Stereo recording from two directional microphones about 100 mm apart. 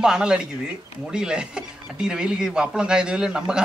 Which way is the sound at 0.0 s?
5° right (ahead or behind).